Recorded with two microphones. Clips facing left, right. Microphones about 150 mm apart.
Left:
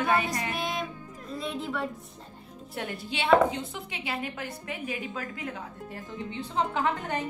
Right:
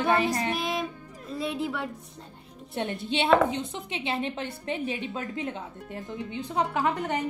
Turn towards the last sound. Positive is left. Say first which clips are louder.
# right 2 dB
turn(degrees=-15)  # may be behind; listen again after turning